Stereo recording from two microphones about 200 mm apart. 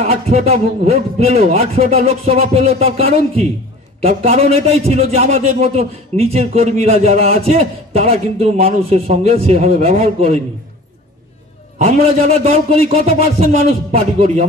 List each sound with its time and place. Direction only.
0.0 s a man's voice: 35° right (ahead or behind)
11.8 s a man's voice: 35° right (ahead or behind)